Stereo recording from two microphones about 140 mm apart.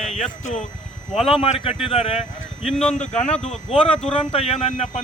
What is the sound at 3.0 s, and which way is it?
Speech, 50° left (ahead or behind).